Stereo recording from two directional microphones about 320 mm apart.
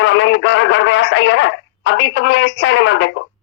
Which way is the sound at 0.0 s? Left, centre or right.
Left.